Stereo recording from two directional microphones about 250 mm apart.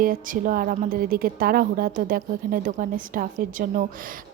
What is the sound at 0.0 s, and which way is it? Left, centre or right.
A woman's voice, right.